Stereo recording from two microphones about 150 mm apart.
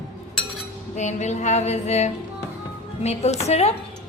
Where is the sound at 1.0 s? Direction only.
50° left (ahead or behind).